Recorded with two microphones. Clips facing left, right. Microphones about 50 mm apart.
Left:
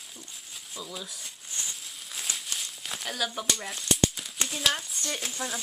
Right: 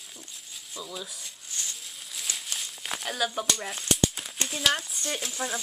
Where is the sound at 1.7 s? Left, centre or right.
Centre.